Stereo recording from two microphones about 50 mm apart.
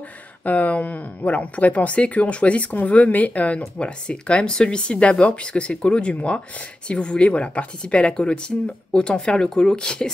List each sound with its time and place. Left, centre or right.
0.5 s speech: left; by 10.1 s centre